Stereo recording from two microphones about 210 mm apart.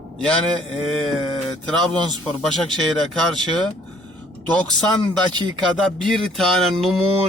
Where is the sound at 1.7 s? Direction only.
5° left (ahead or behind).